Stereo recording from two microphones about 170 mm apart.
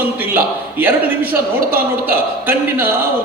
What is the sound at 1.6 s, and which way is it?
Speech, 60° right (ahead or behind).